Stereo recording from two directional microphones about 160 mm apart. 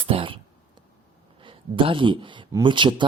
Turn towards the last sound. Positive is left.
turn(degrees=-30)  # may be behind; listen again after turning